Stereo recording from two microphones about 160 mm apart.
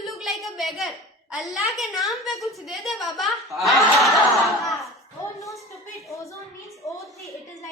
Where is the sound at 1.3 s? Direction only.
Centre (ahead or behind).